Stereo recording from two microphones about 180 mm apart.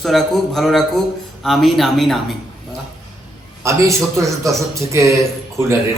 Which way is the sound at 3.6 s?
15° right (ahead or behind).